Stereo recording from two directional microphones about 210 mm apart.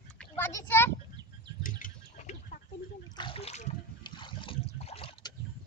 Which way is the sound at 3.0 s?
20° left (ahead or behind).